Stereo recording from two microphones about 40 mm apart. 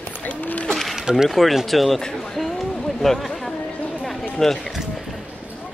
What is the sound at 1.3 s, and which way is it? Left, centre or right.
Speech, centre.